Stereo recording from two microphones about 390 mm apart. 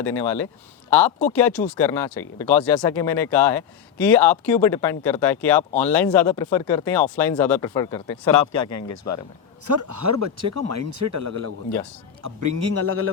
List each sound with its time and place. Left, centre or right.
0.0 s speech: centre
8.4 s speech: left
9.6 s a man's voice: right